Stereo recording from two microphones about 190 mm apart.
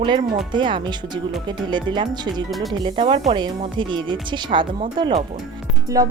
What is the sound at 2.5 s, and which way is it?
Speech, centre (ahead or behind).